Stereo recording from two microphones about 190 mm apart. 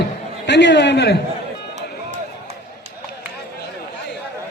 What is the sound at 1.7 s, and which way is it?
Music, 35° right (ahead or behind).